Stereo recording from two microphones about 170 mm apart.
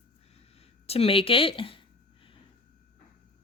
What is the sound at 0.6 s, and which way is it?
Speech, 35° left (ahead or behind).